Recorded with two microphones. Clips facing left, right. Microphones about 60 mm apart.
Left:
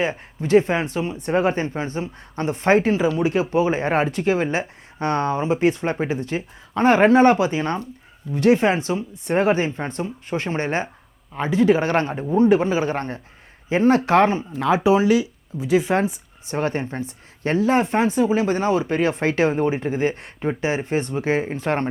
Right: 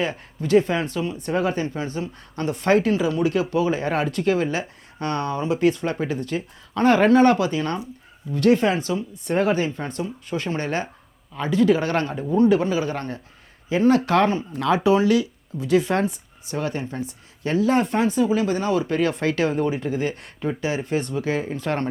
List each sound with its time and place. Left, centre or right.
0.0 s speech: left
14.8 s speech: centre
16.5 s speech: left